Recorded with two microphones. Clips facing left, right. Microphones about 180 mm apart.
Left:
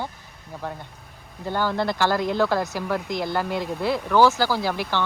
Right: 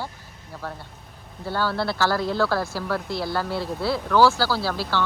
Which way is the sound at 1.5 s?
15° left (ahead or behind).